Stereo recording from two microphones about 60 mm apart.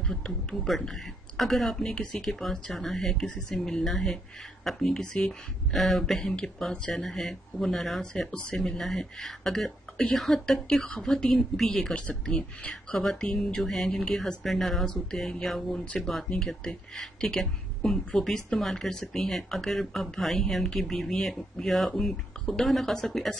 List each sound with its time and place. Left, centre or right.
0.0 s speech: centre
0.7 s speech: centre
8.1 s speech: centre
11.9 s speech: centre
12.9 s speech: centre